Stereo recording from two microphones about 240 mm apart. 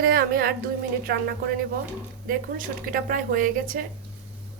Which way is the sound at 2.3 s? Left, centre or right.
Right.